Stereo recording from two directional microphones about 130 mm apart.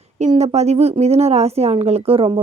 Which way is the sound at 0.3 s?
55° right (ahead or behind).